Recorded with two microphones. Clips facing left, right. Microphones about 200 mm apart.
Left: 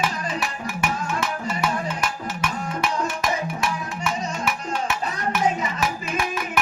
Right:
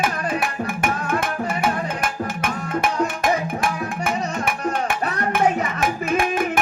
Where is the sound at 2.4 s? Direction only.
50° right (ahead or behind).